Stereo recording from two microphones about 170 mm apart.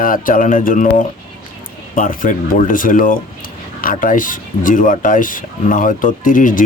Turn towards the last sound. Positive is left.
turn(degrees=50)  # may be behind; listen again after turning